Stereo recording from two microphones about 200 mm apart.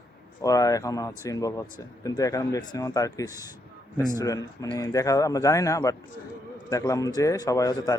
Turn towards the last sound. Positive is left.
turn(degrees=15)  # may be behind; listen again after turning